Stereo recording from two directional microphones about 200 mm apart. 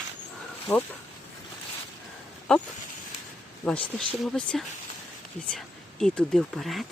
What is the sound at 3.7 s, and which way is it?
Speech, 5° left (ahead or behind).